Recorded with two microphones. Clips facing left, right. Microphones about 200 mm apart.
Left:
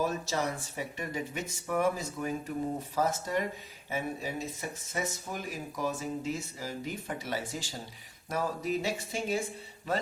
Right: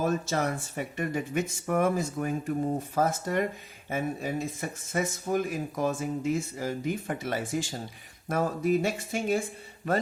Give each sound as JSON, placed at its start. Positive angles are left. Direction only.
{"t": 0.0, "sound": "speech", "side_deg": -50}